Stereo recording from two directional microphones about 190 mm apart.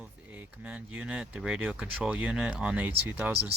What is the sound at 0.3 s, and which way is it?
Speech, 10° right (ahead or behind).